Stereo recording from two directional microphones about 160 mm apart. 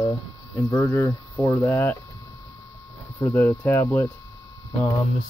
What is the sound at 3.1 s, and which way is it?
Speech, 15° left (ahead or behind).